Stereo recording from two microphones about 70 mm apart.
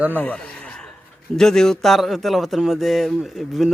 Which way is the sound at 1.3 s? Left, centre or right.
Centre.